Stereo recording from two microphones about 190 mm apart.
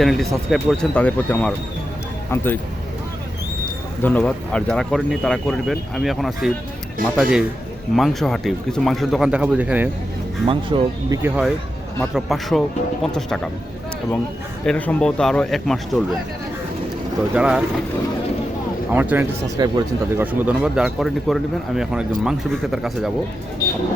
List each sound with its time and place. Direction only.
0.0 s speech: centre (ahead or behind)
4.0 s speech: 5° left (ahead or behind)
10.4 s speech: 25° right (ahead or behind)
11.2 s speech: 5° right (ahead or behind)
14.6 s speech: 5° left (ahead or behind)
17.3 s speech: 5° right (ahead or behind)
18.9 s speech: 10° right (ahead or behind)
19.5 s speech: 20° right (ahead or behind)
20.2 s speech: 10° right (ahead or behind)